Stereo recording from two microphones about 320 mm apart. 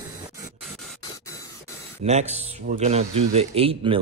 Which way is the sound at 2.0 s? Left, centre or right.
Right.